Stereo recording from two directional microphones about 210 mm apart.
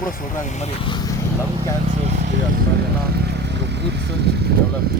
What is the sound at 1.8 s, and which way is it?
Vehicle, 35° right (ahead or behind).